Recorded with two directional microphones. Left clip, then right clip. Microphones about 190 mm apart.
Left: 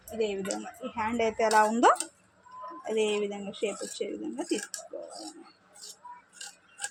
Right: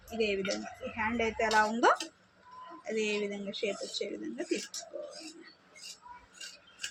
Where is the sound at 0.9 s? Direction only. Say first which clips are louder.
Left 3 dB; 45° left (ahead or behind).